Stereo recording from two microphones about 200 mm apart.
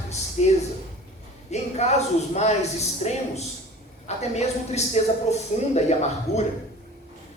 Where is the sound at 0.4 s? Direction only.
35° left (ahead or behind).